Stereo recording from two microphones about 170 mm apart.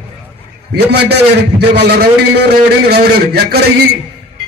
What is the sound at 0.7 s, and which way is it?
A man's voice, 75° right (ahead or behind).